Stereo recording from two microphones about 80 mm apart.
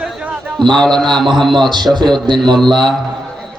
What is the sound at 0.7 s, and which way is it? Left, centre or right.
Speech, centre.